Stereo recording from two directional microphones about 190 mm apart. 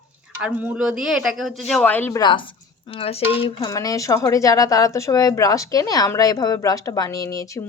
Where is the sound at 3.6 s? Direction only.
20° left (ahead or behind).